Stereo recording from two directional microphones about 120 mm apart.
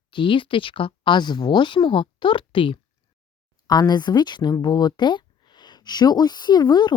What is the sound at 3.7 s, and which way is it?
A woman's voice, 35° left (ahead or behind).